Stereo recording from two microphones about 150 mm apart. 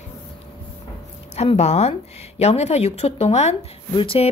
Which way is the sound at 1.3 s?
45° left (ahead or behind).